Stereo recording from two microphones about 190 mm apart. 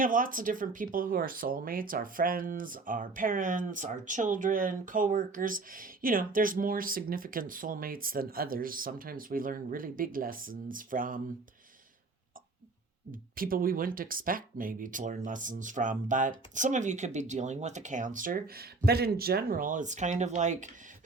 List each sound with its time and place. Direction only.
0.0 s speech: 45° right (ahead or behind)
13.1 s speech: 50° right (ahead or behind)